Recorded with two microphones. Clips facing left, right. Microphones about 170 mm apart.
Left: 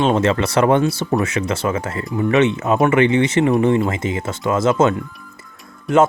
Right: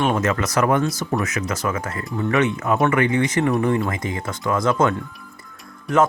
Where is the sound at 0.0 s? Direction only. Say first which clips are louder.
Left 4 dB; 25° left (ahead or behind).